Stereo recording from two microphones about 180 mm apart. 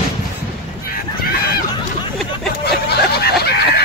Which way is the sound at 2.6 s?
65° left (ahead or behind).